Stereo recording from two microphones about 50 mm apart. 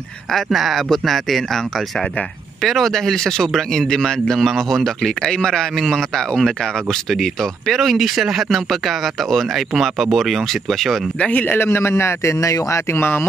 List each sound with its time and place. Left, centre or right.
0.3 s speech: centre
11.1 s a man's voice: left
11.4 s a man's voice: left
12.9 s speech: left